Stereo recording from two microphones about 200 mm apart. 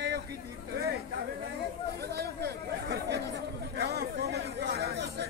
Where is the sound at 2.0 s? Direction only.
55° right (ahead or behind).